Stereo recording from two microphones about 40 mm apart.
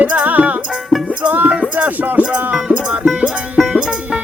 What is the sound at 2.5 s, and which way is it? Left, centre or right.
Music, right.